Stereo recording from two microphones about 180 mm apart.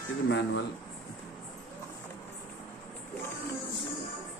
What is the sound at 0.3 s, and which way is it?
Speech, 90° left.